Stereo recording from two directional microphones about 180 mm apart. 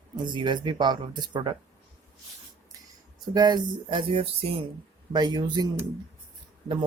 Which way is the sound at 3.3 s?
20° right (ahead or behind).